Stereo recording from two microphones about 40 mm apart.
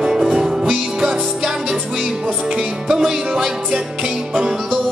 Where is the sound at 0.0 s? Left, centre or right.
Centre.